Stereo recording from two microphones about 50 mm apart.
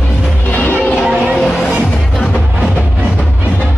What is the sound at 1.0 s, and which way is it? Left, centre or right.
Vehicle, centre.